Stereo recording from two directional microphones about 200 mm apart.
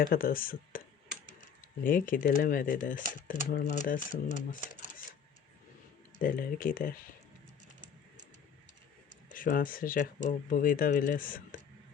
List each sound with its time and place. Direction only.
0.0 s speech: 45° left (ahead or behind)
1.8 s speech: 45° left (ahead or behind)
6.2 s speech: 45° left (ahead or behind)
9.3 s speech: 45° left (ahead or behind)